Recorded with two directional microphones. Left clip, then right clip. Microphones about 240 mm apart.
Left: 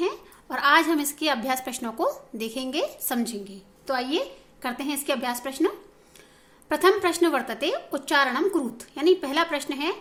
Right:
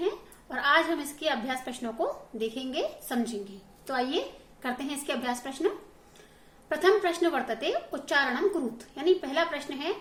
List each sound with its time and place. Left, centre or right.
0.5 s a woman's voice: left